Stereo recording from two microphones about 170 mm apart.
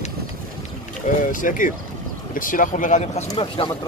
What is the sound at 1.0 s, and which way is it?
Speech, 50° left (ahead or behind).